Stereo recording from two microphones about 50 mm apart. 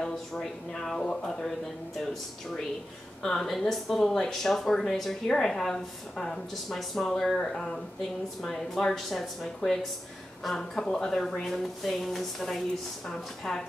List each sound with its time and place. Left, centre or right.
0.0 s speech: centre
3.2 s a woman's voice: centre